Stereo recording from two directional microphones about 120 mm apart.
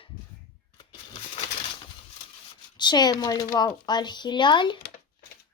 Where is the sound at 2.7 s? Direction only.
35° left (ahead or behind).